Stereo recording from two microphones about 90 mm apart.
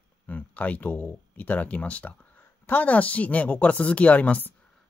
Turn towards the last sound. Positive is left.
turn(degrees=15)  # may be behind; listen again after turning